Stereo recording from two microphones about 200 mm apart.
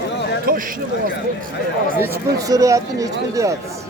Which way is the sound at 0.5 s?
45° right (ahead or behind).